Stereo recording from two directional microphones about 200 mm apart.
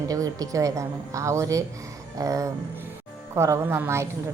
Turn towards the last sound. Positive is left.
turn(degrees=-15)  # may be behind; listen again after turning